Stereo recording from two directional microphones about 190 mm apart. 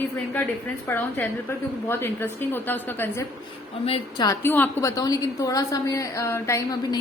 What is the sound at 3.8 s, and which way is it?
Speech, 30° left (ahead or behind).